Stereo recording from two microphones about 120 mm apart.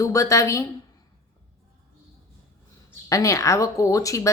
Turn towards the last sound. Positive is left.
turn(degrees=30)  # may be behind; listen again after turning